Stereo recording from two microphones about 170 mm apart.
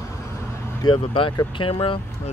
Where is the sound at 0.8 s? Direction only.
30° left (ahead or behind).